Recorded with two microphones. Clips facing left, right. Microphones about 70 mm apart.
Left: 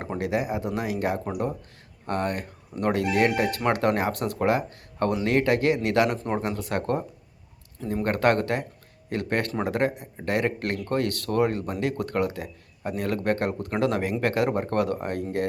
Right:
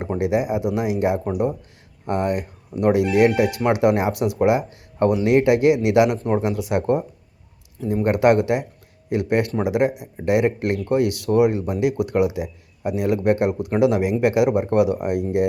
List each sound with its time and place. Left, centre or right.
0.2 s speech: centre
6.1 s speech: centre
6.4 s speech: centre